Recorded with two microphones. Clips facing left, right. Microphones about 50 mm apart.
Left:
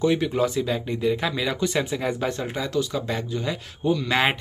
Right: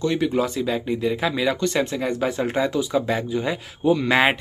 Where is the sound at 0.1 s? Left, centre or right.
Centre.